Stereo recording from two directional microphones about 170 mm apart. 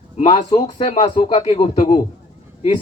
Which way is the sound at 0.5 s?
40° left (ahead or behind).